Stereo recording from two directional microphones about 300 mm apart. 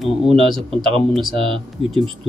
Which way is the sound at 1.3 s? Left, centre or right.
Centre.